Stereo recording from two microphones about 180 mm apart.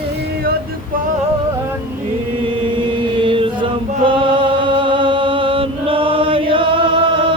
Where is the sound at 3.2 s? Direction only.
30° right (ahead or behind).